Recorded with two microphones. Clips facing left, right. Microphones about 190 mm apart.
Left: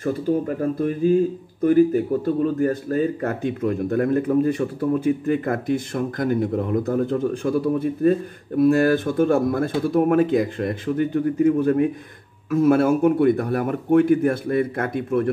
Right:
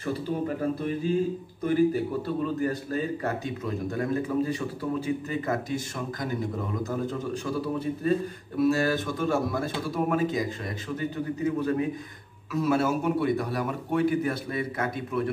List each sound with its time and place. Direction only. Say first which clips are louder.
0.6 s speech: left 6 dB; 45° left (ahead or behind)